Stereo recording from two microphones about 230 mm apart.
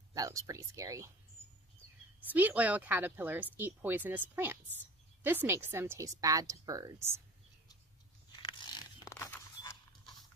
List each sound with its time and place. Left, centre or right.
0.1 s speech: centre
2.1 s speech: centre
8.3 s a sound: centre